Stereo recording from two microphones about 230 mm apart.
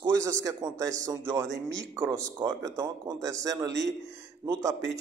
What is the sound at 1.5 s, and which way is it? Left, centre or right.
Speech, right.